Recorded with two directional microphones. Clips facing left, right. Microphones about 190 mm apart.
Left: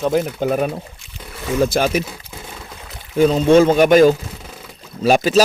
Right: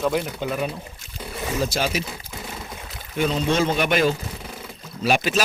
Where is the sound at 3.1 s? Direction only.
40° left (ahead or behind).